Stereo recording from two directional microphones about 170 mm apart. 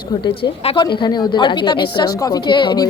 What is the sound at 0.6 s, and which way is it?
A woman's voice, 30° left (ahead or behind).